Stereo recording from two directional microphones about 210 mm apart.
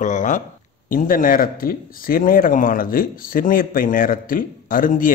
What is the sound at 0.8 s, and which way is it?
Speech, 40° left (ahead or behind).